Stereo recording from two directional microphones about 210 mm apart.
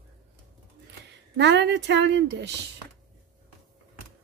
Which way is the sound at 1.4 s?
55° right (ahead or behind).